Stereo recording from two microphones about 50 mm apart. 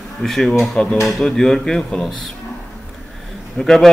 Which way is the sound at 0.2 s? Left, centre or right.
Centre.